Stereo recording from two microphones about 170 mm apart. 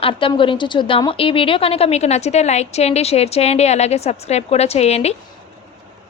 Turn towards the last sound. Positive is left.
turn(degrees=40)  # may be behind; listen again after turning